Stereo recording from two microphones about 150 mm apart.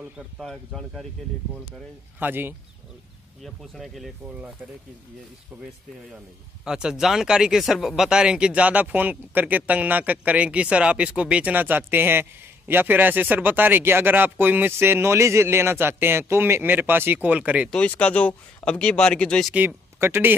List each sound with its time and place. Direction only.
0.4 s speech: centre (ahead or behind)
2.1 s speech: 15° right (ahead or behind)
3.4 s speech: centre (ahead or behind)
6.6 s speech: 5° right (ahead or behind)
17.6 s speech: 5° left (ahead or behind)
19.5 s speech: 15° right (ahead or behind)